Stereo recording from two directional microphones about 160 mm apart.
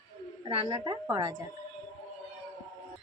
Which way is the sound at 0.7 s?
25° right (ahead or behind).